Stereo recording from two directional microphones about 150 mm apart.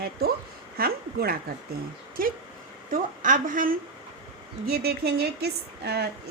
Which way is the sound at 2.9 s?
60° right (ahead or behind).